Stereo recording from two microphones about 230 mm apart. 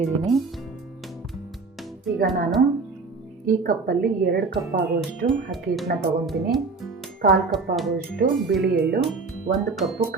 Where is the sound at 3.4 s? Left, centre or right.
Right.